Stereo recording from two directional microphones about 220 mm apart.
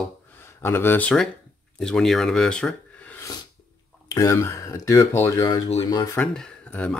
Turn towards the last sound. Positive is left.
turn(degrees=5)  # may be behind; listen again after turning